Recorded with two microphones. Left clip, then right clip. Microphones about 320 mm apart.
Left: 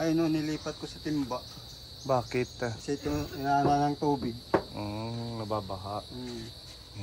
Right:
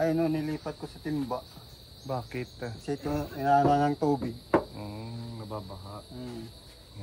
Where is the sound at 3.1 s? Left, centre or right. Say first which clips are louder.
Right 4 dB; right.